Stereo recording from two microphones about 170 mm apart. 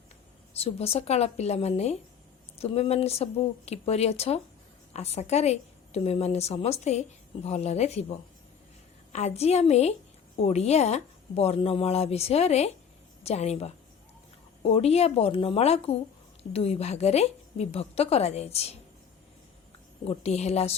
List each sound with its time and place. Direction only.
0.5 s speech: 35° left (ahead or behind)
9.1 s speech: 40° left (ahead or behind)
20.1 s speech: 40° left (ahead or behind)